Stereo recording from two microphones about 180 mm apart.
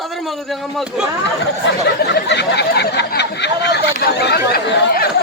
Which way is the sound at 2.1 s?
70° left (ahead or behind).